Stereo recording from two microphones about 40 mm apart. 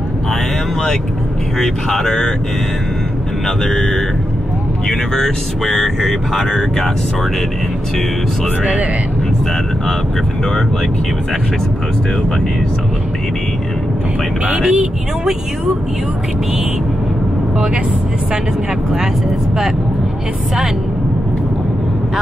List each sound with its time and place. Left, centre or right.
1.6 s speech: centre
3.6 s speech: centre
14.7 s speech: centre